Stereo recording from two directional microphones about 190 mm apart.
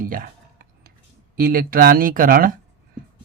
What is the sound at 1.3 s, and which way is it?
Speech, 50° right (ahead or behind).